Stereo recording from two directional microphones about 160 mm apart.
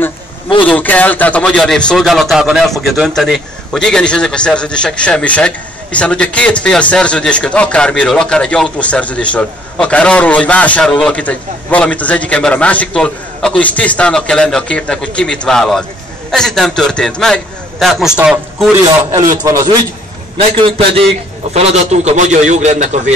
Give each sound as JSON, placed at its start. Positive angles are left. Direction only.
{"t": 0.7, "sound": "a man's voice", "side_deg": 10}
{"t": 19.1, "sound": "a man's voice", "side_deg": -20}
{"t": 20.3, "sound": "a man's voice", "side_deg": -35}
{"t": 21.5, "sound": "a man's voice", "side_deg": -45}